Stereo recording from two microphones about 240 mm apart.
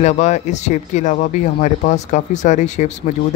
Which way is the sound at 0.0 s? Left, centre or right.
Left.